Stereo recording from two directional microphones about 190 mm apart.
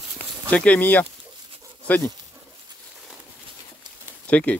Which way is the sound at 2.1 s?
20° right (ahead or behind).